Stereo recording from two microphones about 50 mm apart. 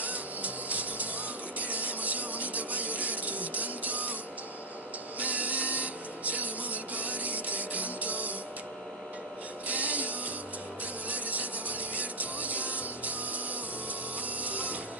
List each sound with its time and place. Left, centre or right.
0.0 s music: right
1.6 s rub: right
5.2 s printer: right
9.7 s printer: right
11.1 s rub: right
14.2 s printer: right